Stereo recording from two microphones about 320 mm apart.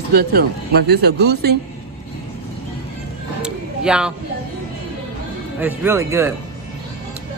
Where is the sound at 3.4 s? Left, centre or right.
Centre.